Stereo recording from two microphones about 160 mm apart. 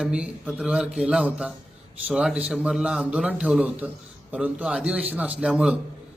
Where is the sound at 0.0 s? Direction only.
5° right (ahead or behind).